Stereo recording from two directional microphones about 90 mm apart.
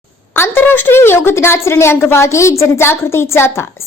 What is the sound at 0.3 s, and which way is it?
A woman's voice, 25° left (ahead or behind).